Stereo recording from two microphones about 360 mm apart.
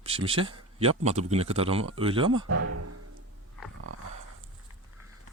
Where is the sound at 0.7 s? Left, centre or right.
Centre.